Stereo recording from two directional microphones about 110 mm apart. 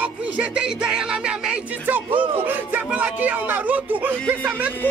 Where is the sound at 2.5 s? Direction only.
15° right (ahead or behind).